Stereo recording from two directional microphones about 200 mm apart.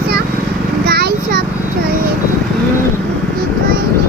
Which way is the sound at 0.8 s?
50° right (ahead or behind).